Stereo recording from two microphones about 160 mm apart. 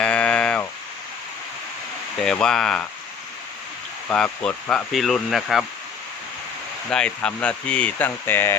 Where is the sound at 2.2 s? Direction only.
5° left (ahead or behind).